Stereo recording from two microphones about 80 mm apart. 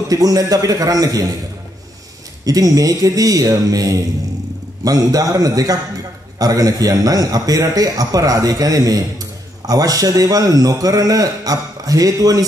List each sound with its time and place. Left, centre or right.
0.1 s a man's voice: right
2.4 s a man's voice: right